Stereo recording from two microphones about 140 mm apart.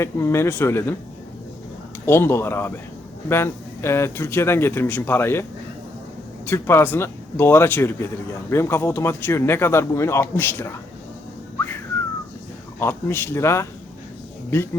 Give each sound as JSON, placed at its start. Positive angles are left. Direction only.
{"t": 0.0, "sound": "speech", "side_deg": 20}
{"t": 2.0, "sound": "speech", "side_deg": 15}
{"t": 12.8, "sound": "speech", "side_deg": 15}